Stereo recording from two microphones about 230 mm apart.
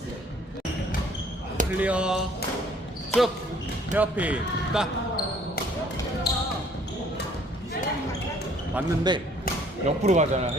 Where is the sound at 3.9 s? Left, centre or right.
Centre.